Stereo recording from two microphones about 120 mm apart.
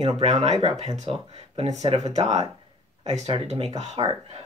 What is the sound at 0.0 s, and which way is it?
Speech, 60° right (ahead or behind).